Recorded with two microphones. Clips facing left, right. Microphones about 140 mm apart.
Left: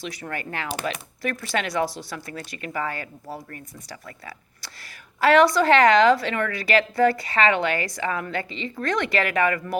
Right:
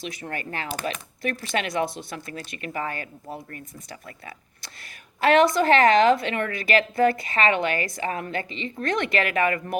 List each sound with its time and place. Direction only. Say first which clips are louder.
0.0 s a woman's voice: left 1 dB; 20° right (ahead or behind)